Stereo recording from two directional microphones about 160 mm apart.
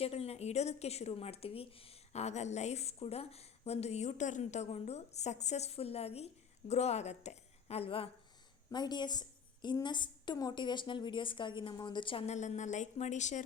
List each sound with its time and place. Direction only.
0.0 s a woman's voice: 40° left (ahead or behind)